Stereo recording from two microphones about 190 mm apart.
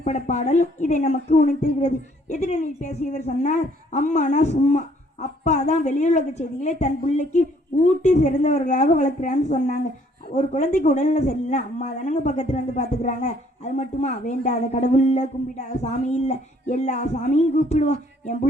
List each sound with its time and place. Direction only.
0.0 s speech: 35° left (ahead or behind)